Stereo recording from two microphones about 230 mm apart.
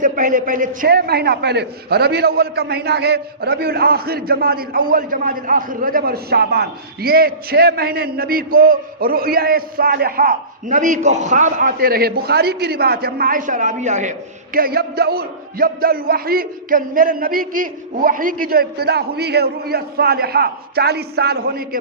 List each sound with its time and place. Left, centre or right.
0.0 s a man's voice: right